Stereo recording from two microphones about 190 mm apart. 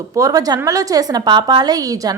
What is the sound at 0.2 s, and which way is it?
A woman's voice, 20° right (ahead or behind).